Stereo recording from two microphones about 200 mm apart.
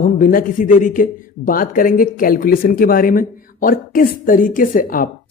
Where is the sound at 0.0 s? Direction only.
45° left (ahead or behind).